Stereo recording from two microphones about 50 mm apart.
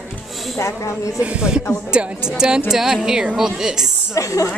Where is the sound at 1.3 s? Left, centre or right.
Centre.